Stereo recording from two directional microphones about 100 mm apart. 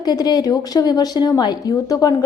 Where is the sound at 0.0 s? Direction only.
45° left (ahead or behind).